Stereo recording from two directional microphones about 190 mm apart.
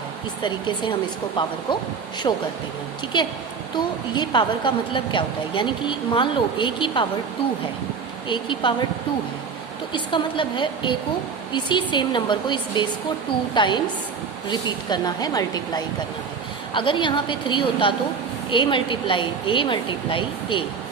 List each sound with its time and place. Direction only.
0.4 s a woman's voice: 25° left (ahead or behind)
8.3 s a woman's voice: 25° left (ahead or behind)
9.9 s a woman's voice: 25° left (ahead or behind)